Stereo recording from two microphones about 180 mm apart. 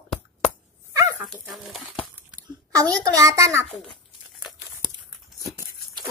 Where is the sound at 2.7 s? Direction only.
20° right (ahead or behind).